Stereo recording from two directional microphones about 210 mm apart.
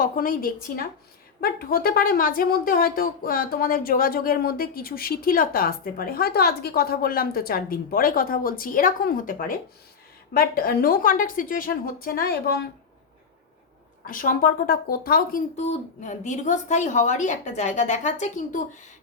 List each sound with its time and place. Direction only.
0.0 s a woman's voice: 40° left (ahead or behind)
14.1 s speech: 40° left (ahead or behind)